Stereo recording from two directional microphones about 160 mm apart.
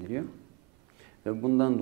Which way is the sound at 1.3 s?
10° right (ahead or behind).